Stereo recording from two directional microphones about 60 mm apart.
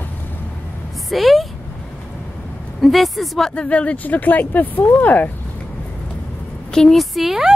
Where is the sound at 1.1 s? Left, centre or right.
Centre.